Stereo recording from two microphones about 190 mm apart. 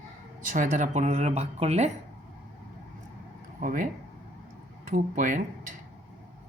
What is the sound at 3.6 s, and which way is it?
Speech, 45° right (ahead or behind).